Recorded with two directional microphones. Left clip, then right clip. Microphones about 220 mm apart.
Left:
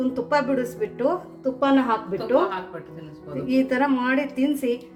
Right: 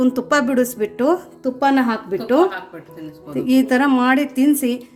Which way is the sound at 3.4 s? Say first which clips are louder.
Right 5 dB; 55° right (ahead or behind).